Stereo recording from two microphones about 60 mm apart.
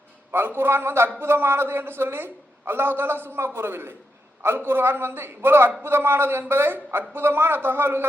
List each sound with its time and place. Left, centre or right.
0.3 s a man's voice: right